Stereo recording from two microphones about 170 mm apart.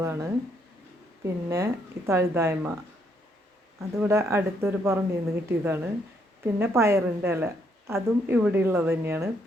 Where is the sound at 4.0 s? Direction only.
15° right (ahead or behind).